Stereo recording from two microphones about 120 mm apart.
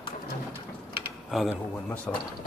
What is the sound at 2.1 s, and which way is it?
Speech, 10° left (ahead or behind).